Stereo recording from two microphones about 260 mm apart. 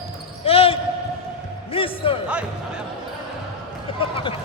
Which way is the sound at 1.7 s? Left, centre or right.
Left.